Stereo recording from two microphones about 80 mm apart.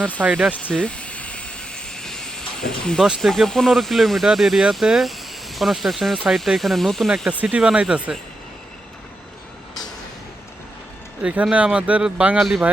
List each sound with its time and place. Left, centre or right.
0.2 s speech: centre
0.7 s a sound: centre
3.2 s speech: centre
7.4 s speech: centre
11.2 s speech: centre
12.4 s speech: centre